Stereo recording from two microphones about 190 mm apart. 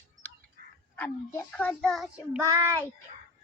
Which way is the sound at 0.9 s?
10° left (ahead or behind).